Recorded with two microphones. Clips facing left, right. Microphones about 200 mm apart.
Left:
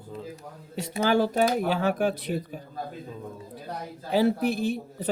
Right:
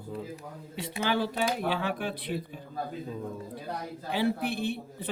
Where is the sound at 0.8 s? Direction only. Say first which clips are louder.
Left 6 dB; 40° left (ahead or behind).